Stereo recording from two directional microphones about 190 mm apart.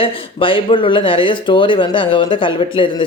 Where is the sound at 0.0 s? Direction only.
25° left (ahead or behind).